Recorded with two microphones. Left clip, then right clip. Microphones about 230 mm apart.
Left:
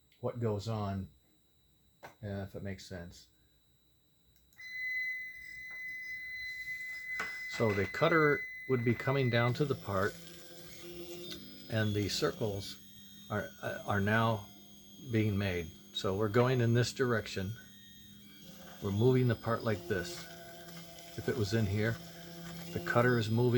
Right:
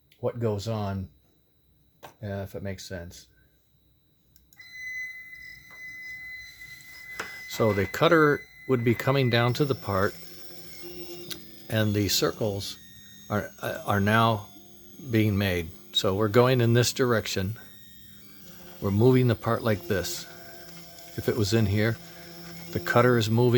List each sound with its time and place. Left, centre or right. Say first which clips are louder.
0.2 s speech: right 7 dB; right
2.2 s speech: right 8 dB; right
7.4 s speech: right 9 dB; right
10.8 s printer: right 5 dB; centre
11.7 s speech: right 9 dB; right
18.8 s speech: right 8 dB; right
20.7 s a sound: right 3 dB; centre
21.2 s speech: right 8 dB; right